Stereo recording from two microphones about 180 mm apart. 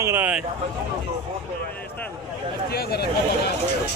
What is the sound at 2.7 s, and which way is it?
Speech, 60° left (ahead or behind).